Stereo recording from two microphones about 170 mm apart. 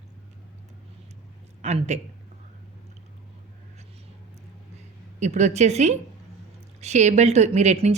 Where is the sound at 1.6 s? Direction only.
40° right (ahead or behind).